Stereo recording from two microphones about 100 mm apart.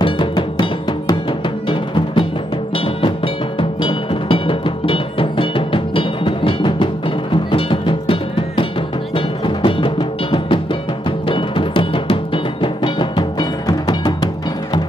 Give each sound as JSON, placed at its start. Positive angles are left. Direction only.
{"t": 0.0, "sound": "music", "side_deg": 55}